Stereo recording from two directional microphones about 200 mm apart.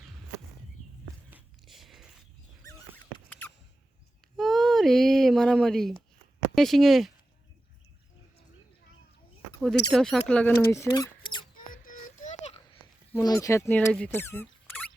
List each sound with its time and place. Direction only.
1.3 s a sound: centre (ahead or behind)
2.6 s rodents: 10° left (ahead or behind)
4.4 s a sound: centre (ahead or behind)
6.5 s speech: centre (ahead or behind)
9.6 s speech: centre (ahead or behind); by 11.4 s 20° left (ahead or behind)
11.5 s child singing: 40° left (ahead or behind)
13.1 s speech: 15° left (ahead or behind)